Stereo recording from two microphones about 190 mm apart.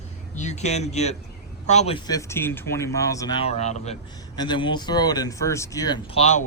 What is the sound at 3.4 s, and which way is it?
Speech, 35° left (ahead or behind).